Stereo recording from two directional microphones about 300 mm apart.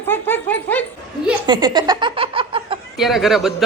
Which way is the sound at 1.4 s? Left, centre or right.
Centre.